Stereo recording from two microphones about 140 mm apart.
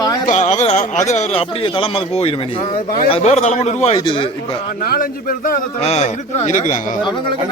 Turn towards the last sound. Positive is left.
turn(degrees=65)  # may be behind; listen again after turning